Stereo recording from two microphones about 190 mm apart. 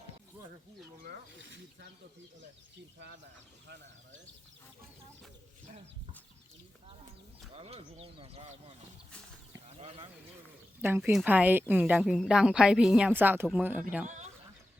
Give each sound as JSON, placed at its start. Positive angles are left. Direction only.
{"t": 7.5, "sound": "speech", "side_deg": -30}
{"t": 10.8, "sound": "a woman's voice", "side_deg": -10}